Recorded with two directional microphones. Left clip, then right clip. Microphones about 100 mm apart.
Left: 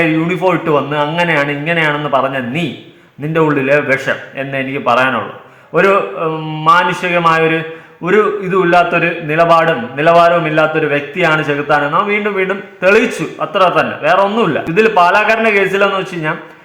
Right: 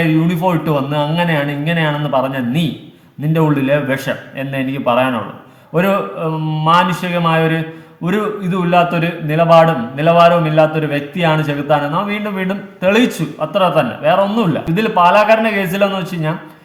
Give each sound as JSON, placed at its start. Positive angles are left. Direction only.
{"t": 0.0, "sound": "a man's voice", "side_deg": -15}